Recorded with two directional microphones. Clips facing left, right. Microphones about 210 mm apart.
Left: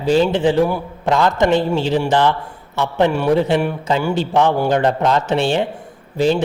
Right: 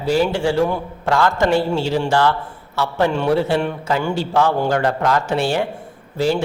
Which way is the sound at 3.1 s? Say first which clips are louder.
Left 2 dB; 10° left (ahead or behind).